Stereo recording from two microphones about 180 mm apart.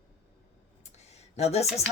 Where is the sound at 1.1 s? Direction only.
35° left (ahead or behind).